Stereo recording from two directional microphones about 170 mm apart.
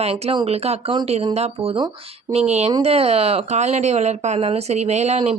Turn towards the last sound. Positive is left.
turn(degrees=-40)  # may be behind; listen again after turning